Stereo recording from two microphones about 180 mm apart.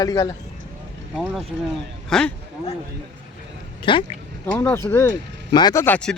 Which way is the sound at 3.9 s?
30° left (ahead or behind).